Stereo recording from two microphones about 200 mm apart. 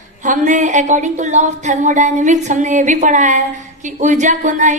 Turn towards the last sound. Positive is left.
turn(degrees=-40)  # may be behind; listen again after turning